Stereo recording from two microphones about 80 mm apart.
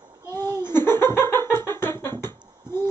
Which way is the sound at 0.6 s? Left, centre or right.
Left.